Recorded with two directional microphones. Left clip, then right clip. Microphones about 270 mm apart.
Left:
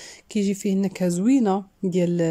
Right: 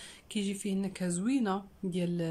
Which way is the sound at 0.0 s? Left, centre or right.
Centre.